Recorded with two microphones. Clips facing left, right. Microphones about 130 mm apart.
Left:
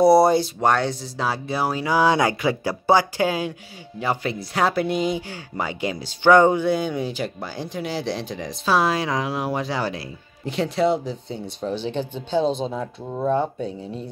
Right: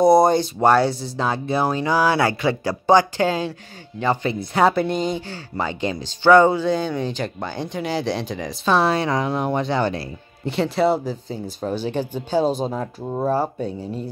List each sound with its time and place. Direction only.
0.0 s speech: 5° left (ahead or behind)
2.0 s speech: 15° left (ahead or behind); by 12.4 s 10° right (ahead or behind)
12.5 s speech: 45° right (ahead or behind)
13.6 s speech: centre (ahead or behind)